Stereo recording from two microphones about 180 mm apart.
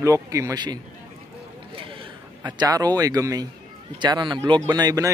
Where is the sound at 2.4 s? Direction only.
20° right (ahead or behind).